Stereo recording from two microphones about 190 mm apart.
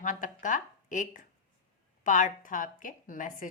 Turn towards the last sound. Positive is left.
turn(degrees=45)  # may be behind; listen again after turning